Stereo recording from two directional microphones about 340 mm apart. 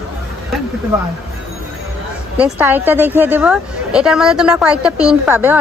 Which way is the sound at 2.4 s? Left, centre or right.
Centre.